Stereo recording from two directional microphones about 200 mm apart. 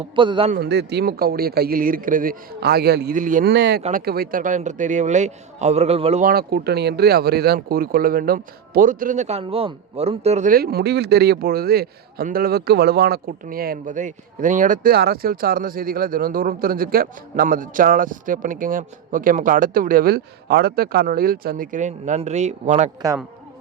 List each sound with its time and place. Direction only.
0.2 s a man's voice: 25° right (ahead or behind)
0.5 s speech: 55° right (ahead or behind)
3.5 s speech: 60° right (ahead or behind)
3.8 s a man's voice: 45° right (ahead or behind); by 6.2 s 30° right (ahead or behind)
6.2 s speech: 50° right (ahead or behind)